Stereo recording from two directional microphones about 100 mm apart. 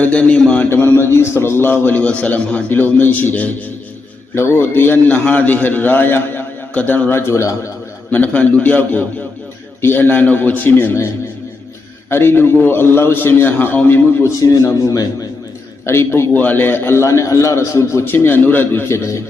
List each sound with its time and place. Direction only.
0.0 s a man's voice: 10° left (ahead or behind)
0.7 s a man's voice: 25° left (ahead or behind)
8.1 s a man's voice: 15° left (ahead or behind)
12.1 s a man's voice: 20° left (ahead or behind)
14.4 s speech: 30° left (ahead or behind)
15.9 s a man's voice: 25° left (ahead or behind)